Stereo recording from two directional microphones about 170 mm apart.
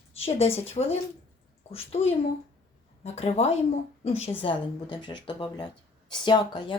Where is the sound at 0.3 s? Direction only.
35° left (ahead or behind).